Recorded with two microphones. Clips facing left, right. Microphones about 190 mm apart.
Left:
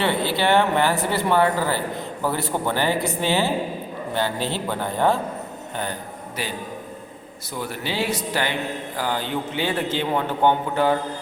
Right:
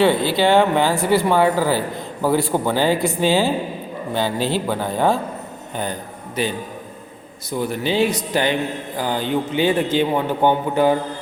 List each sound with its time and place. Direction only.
0.0 s a man's voice: 15° right (ahead or behind)
6.4 s speech: 20° right (ahead or behind)
7.6 s a man's voice: 20° right (ahead or behind)